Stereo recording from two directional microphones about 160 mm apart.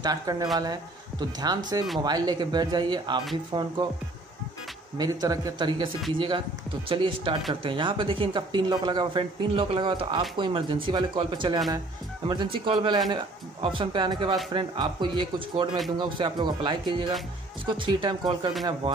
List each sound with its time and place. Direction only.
0.0 s speech: 25° right (ahead or behind)
4.9 s speech: 25° right (ahead or behind)